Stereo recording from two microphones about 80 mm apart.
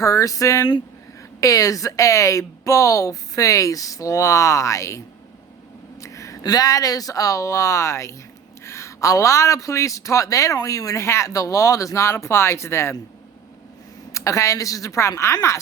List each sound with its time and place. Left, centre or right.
0.0 s a man's voice: left
14.1 s a man's voice: left